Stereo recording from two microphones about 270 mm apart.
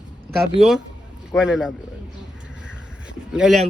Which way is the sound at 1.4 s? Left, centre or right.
Centre.